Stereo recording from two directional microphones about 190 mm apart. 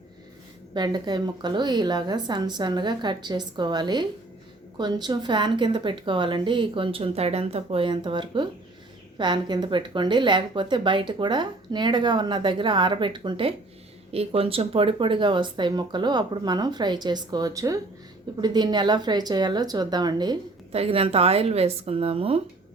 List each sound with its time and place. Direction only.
0.7 s a woman's voice: 25° right (ahead or behind)